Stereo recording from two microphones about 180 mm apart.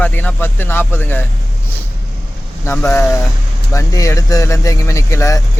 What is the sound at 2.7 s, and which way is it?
Speech, 15° left (ahead or behind).